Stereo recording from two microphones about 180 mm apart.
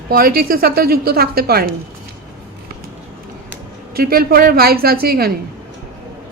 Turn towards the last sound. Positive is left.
turn(degrees=-55)  # may be behind; listen again after turning